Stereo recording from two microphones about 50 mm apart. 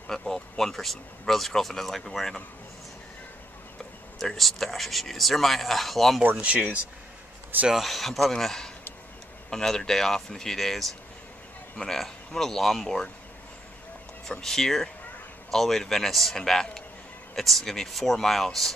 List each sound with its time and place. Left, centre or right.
0.0 s speech: centre
4.2 s speech: centre
6.3 s speech: right
7.7 s speech: centre
14.2 s speech: centre